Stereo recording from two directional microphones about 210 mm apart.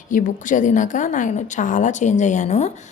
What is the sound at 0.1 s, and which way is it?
A woman's voice, 40° left (ahead or behind).